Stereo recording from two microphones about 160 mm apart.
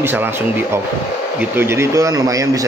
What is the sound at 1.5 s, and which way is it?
Speech, 15° right (ahead or behind).